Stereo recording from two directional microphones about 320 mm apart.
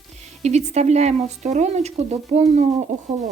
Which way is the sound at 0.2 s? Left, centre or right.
Right.